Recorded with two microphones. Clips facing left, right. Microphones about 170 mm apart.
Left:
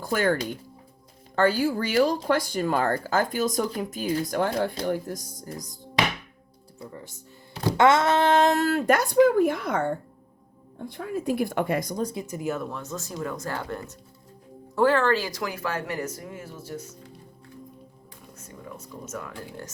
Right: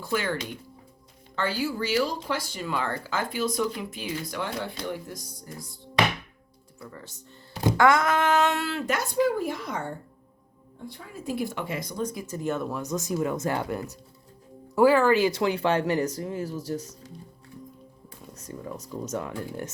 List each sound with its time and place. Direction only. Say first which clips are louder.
0.0 s speech: left 5 dB; 50° left (ahead or behind)
1.4 s speech: left 6 dB; 50° left (ahead or behind)
6.7 s speech: left 2 dB; 20° left (ahead or behind); by 9.9 s 60° left (ahead or behind)
10.9 s speech: left 12 dB; 65° left (ahead or behind)
11.3 s speech: left 4 dB; 50° left (ahead or behind)
12.3 s speech: even; 5° left (ahead or behind)
12.7 s speech: right 5 dB; 15° right (ahead or behind)
15.2 s speech: right 7 dB; 25° right (ahead or behind)
18.3 s speech: right 5 dB; 35° right (ahead or behind)